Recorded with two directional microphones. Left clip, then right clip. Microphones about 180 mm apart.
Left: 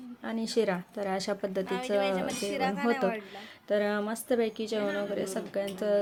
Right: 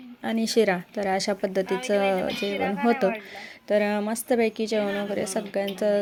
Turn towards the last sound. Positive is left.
turn(degrees=-30)  # may be behind; listen again after turning